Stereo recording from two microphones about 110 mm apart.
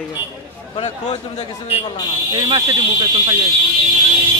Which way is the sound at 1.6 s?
55° left (ahead or behind).